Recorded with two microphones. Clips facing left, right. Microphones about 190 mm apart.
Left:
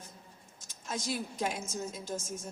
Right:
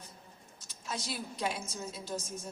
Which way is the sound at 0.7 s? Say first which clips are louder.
Left 3 dB; 45° left (ahead or behind).